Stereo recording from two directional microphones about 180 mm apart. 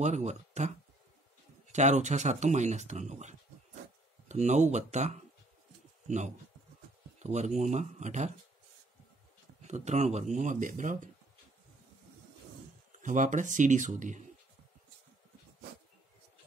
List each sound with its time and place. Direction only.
0.0 s speech: 40° right (ahead or behind)
9.6 s speech: 40° right (ahead or behind)
13.0 s speech: 45° right (ahead or behind)